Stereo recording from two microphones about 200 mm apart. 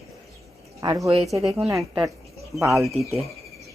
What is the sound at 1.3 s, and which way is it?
Speech, 10° right (ahead or behind).